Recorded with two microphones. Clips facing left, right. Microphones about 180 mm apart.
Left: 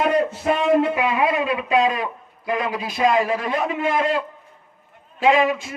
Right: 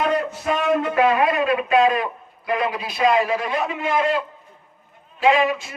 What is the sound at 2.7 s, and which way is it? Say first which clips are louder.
A man's voice: left 1 dB; 40° left (ahead or behind).